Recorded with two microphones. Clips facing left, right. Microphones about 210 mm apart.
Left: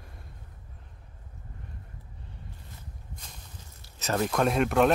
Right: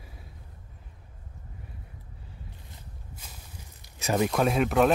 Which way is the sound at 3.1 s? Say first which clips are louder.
Right 1 dB; 10° right (ahead or behind).